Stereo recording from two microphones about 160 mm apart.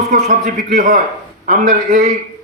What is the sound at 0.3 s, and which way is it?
Speech, 55° right (ahead or behind).